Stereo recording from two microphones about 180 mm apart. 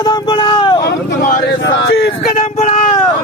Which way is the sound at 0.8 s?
60° left (ahead or behind).